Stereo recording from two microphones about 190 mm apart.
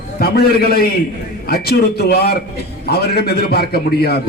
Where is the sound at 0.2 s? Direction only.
55° left (ahead or behind).